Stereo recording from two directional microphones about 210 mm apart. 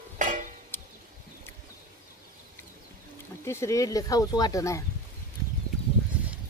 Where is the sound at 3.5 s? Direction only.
15° left (ahead or behind).